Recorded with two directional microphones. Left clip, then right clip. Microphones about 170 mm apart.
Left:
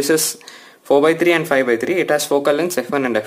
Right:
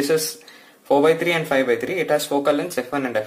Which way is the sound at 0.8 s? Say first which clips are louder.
Left 3 dB; 40° left (ahead or behind).